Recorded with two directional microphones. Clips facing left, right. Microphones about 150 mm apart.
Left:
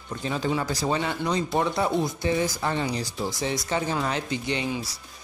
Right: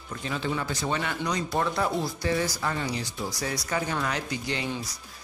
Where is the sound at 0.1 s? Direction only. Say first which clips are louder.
Left 4 dB; 35° left (ahead or behind).